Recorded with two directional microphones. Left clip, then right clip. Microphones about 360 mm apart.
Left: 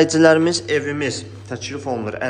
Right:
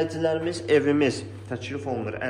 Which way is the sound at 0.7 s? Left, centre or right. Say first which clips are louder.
Even; centre.